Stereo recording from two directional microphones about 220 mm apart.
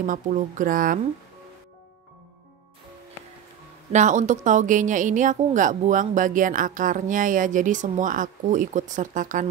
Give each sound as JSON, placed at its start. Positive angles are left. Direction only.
{"t": 0.0, "sound": "a woman's voice", "side_deg": -35}
{"t": 3.9, "sound": "a woman's voice", "side_deg": -35}